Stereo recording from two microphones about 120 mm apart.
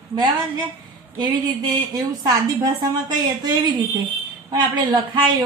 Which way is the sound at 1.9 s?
35° right (ahead or behind).